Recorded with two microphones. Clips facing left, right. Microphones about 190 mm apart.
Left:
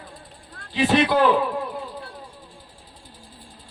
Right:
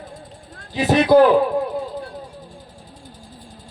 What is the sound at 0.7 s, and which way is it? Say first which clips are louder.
Speech: right 5 dB; 45° right (ahead or behind).